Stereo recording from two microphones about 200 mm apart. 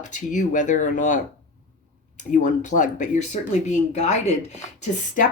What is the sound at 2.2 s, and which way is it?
Speech, 40° left (ahead or behind).